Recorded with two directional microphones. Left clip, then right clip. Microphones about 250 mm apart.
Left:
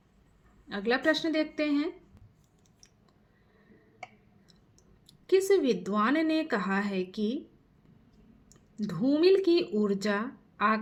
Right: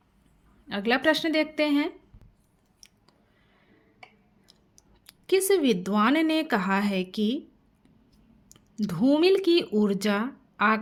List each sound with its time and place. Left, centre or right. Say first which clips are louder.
0.7 s speech: right 4 dB; right
5.0 s speech: right 1 dB; right
8.4 s speech: right 4 dB; right